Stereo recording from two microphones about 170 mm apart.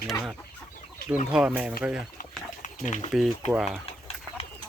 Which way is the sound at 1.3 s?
5° right (ahead or behind).